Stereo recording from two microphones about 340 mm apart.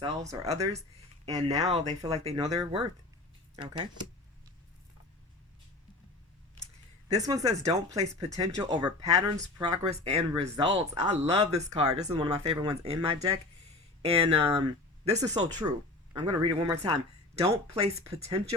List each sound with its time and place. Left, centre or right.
0.0 s speech: centre
7.2 s speech: centre